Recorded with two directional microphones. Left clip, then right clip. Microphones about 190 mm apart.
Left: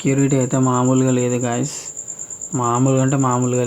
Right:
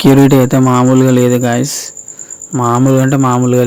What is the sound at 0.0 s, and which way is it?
Speech, 40° right (ahead or behind).